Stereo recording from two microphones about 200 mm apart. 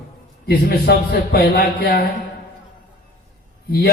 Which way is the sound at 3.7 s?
50° left (ahead or behind).